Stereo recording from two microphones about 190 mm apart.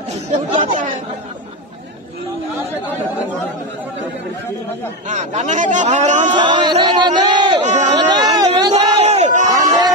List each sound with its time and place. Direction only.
0.1 s chatter: 40° right (ahead or behind)
5.0 s speech: 40° right (ahead or behind)
6.3 s crowd: 25° right (ahead or behind)
7.6 s chatter: 40° right (ahead or behind)
7.9 s chatter: 20° right (ahead or behind)
9.0 s a sound: 35° right (ahead or behind)